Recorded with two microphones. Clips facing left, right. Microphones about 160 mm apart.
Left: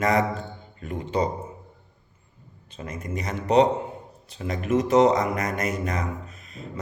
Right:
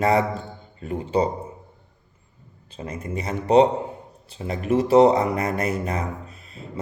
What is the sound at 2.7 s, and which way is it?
A man's voice, 30° right (ahead or behind).